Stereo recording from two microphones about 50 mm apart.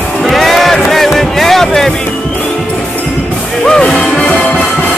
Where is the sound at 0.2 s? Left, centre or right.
Centre.